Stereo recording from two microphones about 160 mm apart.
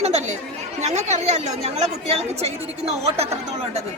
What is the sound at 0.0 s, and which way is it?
Chatter, 45° right (ahead or behind).